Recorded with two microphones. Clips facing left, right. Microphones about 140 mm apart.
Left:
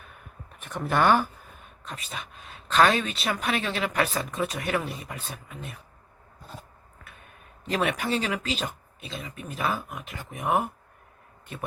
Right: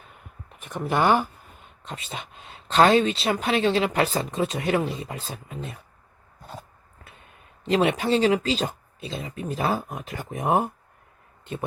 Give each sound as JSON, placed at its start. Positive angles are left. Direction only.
{"t": 0.6, "sound": "speech", "side_deg": -15}
{"t": 1.8, "sound": "speech", "side_deg": -25}
{"t": 7.6, "sound": "speech", "side_deg": -25}